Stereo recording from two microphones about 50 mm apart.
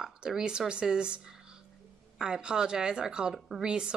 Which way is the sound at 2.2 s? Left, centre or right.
Centre.